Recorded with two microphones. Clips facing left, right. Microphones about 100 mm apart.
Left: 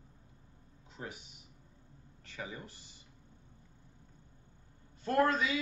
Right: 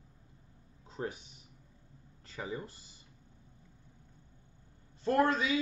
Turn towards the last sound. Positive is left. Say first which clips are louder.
# right 1 dB
turn(degrees=-30)  # may be behind; listen again after turning